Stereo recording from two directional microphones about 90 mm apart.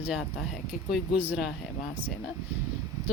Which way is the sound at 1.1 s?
20° right (ahead or behind).